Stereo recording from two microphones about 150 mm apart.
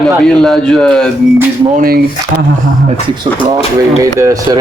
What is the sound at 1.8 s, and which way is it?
Speech, 85° right.